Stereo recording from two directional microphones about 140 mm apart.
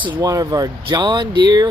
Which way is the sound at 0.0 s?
25° right (ahead or behind).